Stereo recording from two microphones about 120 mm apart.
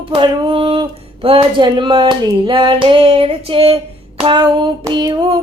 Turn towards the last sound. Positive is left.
turn(degrees=-40)  # may be behind; listen again after turning